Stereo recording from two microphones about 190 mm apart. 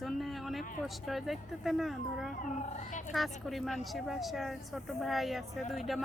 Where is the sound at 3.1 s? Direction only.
Centre (ahead or behind).